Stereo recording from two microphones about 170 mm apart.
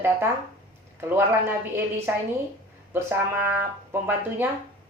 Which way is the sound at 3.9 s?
10° right (ahead or behind).